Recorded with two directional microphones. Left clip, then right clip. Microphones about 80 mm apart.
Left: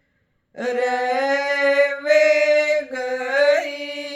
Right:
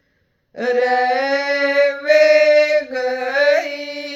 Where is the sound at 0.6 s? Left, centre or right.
Left.